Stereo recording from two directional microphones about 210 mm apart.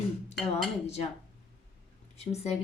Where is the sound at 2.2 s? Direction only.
30° left (ahead or behind).